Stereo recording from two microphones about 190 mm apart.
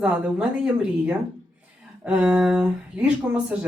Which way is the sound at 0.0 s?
5° right (ahead or behind).